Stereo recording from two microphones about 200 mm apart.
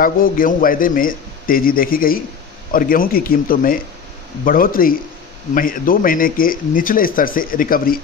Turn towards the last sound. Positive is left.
turn(degrees=45)  # may be behind; listen again after turning